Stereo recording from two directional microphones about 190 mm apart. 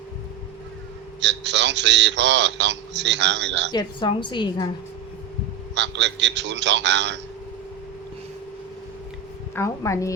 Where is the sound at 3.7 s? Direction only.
25° left (ahead or behind).